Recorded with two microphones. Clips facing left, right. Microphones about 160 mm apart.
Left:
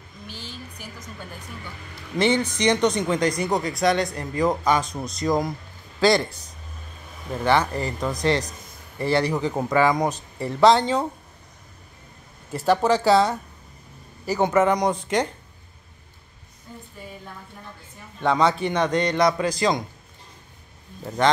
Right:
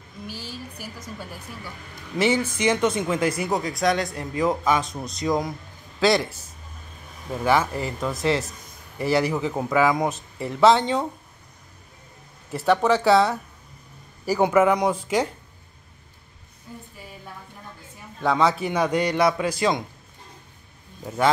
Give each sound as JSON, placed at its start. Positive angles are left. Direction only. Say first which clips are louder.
{"t": 0.3, "sound": "speech", "louder": "right 2 dB", "side_deg": -5}
{"t": 2.1, "sound": "a man's voice", "louder": "left 1 dB", "side_deg": -5}
{"t": 12.4, "sound": "a man's voice", "louder": "even", "side_deg": 0}
{"t": 18.2, "sound": "a man's voice", "louder": "left 1 dB", "side_deg": 0}